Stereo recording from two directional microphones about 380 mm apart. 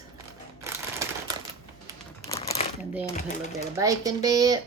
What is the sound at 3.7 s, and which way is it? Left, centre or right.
Speech, centre.